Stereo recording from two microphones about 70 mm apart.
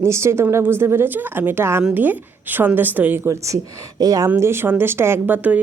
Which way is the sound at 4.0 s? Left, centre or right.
Right.